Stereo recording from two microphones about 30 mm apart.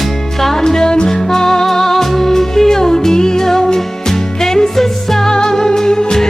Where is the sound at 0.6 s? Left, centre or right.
Left.